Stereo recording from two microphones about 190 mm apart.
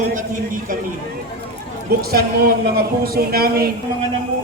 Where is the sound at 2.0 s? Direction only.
55° right (ahead or behind).